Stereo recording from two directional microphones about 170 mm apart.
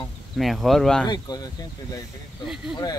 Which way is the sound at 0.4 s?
Centre (ahead or behind).